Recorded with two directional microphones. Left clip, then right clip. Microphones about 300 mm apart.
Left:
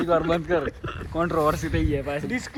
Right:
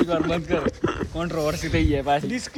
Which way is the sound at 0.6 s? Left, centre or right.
Centre.